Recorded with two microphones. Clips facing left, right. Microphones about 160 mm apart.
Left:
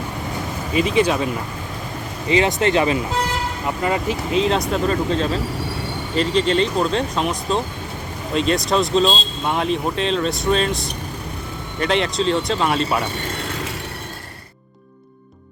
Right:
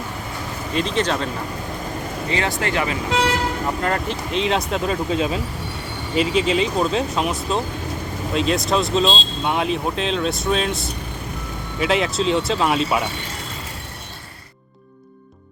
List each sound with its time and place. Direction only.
0.7 s speech: 10° left (ahead or behind)
2.3 s speech: 20° left (ahead or behind)
3.1 s vehicle: 80° right
3.8 s speech: 5° left (ahead or behind)